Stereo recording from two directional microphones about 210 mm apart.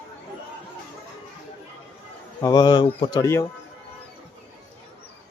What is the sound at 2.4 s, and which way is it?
Speech, 20° left (ahead or behind).